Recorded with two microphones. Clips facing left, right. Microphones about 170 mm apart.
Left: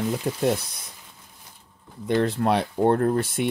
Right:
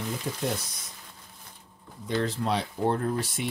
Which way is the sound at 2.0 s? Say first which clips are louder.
Left 6 dB; 60° left (ahead or behind).